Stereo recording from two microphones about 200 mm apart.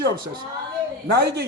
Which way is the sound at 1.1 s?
55° right (ahead or behind).